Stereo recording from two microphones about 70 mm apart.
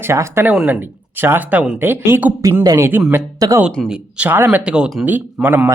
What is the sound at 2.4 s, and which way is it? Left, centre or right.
Speech, right.